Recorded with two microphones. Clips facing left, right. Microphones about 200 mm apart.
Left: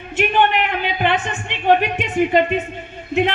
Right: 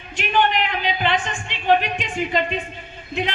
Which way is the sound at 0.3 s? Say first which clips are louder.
Even; 55° left (ahead or behind).